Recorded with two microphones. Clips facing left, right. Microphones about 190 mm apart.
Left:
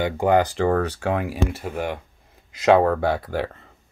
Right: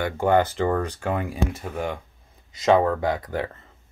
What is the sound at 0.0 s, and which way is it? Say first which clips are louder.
Speech: left 1 dB; 15° left (ahead or behind).